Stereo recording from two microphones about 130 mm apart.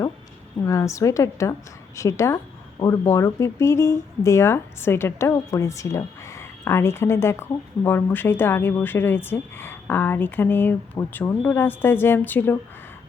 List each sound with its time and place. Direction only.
0.6 s speech: 25° left (ahead or behind)